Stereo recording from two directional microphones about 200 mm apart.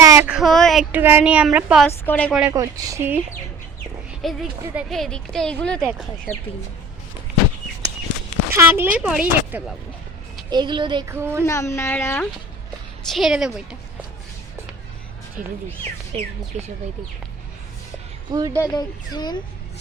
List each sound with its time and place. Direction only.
0.0 s a sound: 15° right (ahead or behind)
0.3 s speech: centre (ahead or behind)
1.9 s speech: 10° left (ahead or behind)
2.5 s speech: 15° right (ahead or behind)
4.2 s speech: centre (ahead or behind)
8.5 s speech: 10° right (ahead or behind)
10.5 s speech: 20° right (ahead or behind)
11.1 s speech: 10° right (ahead or behind)
11.4 s speech: 15° left (ahead or behind)
13.1 s speech: centre (ahead or behind)
15.4 s speech: 40° right (ahead or behind)
18.3 s speech: 15° right (ahead or behind)
18.6 s speech: 20° left (ahead or behind)